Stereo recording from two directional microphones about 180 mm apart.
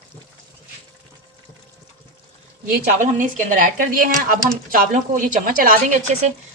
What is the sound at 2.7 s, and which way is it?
Speech, 45° right (ahead or behind).